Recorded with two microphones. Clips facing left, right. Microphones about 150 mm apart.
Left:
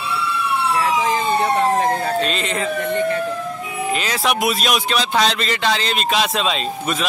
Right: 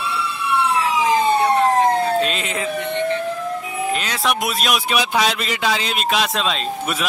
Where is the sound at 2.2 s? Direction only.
5° right (ahead or behind).